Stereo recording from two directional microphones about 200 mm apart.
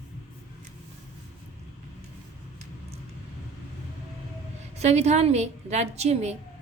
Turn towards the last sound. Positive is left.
turn(degrees=-35)  # may be behind; listen again after turning